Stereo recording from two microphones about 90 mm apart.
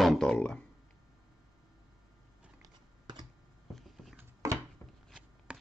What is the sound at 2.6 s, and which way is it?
Biting, 50° right (ahead or behind).